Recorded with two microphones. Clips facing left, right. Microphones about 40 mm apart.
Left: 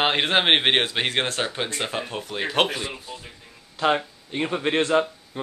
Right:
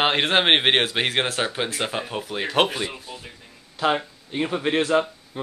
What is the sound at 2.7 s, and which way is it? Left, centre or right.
Speech, right.